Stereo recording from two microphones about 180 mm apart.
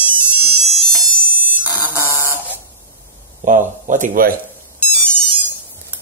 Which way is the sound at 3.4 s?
45° right (ahead or behind).